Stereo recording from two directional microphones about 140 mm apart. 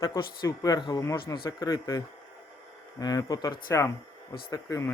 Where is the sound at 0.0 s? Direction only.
25° left (ahead or behind).